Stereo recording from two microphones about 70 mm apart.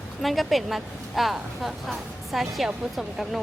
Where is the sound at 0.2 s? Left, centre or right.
Centre.